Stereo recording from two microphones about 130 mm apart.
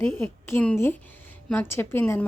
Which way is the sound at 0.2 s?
15° left (ahead or behind).